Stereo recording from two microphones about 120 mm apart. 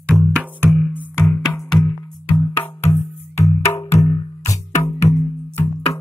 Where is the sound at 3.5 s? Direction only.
40° left (ahead or behind).